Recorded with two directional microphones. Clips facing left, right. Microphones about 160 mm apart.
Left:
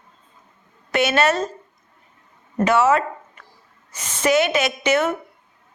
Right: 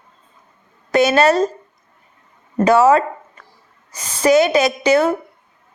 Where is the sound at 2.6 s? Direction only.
35° right (ahead or behind).